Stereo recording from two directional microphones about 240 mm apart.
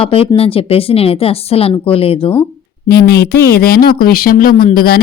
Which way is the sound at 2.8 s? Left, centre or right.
Left.